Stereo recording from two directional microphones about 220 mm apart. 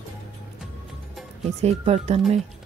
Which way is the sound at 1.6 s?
30° right (ahead or behind).